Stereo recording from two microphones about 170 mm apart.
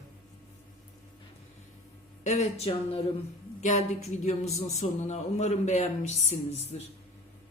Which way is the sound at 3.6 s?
45° left (ahead or behind).